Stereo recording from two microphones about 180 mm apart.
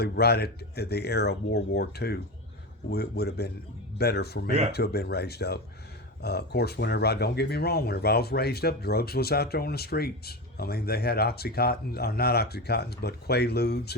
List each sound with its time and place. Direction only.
0.0 s speech: 60° left (ahead or behind)